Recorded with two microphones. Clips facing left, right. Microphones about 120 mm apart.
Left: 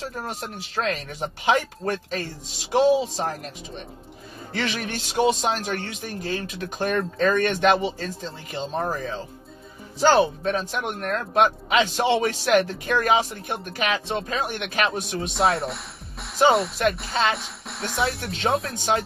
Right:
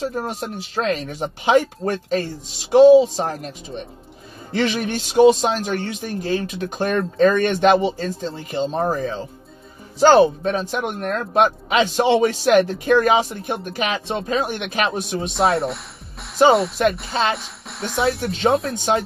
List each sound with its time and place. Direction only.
0.2 s a man's voice: 25° right (ahead or behind)
4.5 s a man's voice: 25° right (ahead or behind)
10.4 s a man's voice: 25° right (ahead or behind)
15.3 s speech: centre (ahead or behind)
17.3 s speech: centre (ahead or behind)